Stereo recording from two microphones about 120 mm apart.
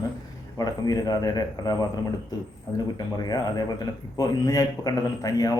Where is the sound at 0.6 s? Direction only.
35° left (ahead or behind).